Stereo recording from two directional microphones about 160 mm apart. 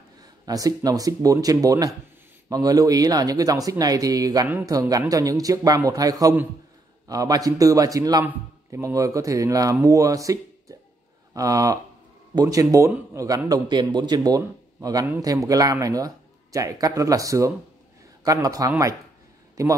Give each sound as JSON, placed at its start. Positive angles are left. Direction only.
{"t": 0.2, "sound": "speech", "side_deg": -25}